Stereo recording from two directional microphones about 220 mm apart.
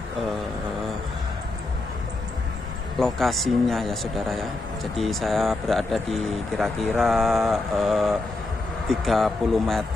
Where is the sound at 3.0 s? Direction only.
Centre (ahead or behind).